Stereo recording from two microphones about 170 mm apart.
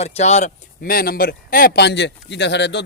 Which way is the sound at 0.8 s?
60° left (ahead or behind).